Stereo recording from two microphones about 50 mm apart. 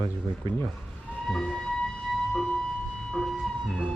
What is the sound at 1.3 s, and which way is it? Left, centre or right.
Vehicle, centre.